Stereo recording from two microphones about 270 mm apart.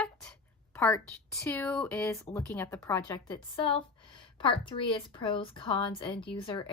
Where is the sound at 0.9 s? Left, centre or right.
Centre.